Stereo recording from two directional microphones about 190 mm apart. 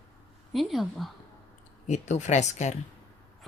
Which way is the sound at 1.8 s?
40° left (ahead or behind).